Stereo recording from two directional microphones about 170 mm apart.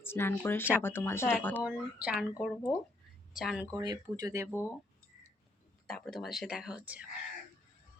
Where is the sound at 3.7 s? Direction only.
20° right (ahead or behind).